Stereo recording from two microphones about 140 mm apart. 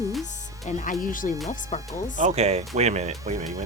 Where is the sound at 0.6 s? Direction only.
75° left (ahead or behind).